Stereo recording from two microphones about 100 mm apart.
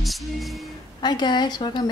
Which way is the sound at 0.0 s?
Centre (ahead or behind).